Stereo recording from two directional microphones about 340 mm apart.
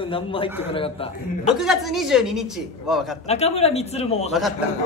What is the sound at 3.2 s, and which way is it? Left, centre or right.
Speech, centre.